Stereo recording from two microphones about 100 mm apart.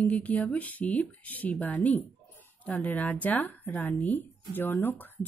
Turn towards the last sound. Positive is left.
turn(degrees=20)  # may be behind; listen again after turning